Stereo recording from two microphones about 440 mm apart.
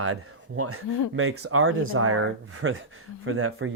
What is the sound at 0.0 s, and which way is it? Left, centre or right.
Speech, right.